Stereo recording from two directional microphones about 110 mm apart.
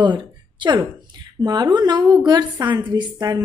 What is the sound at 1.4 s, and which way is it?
A woman's voice, 40° right (ahead or behind).